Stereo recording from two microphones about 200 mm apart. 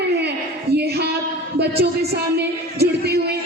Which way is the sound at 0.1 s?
55° right (ahead or behind).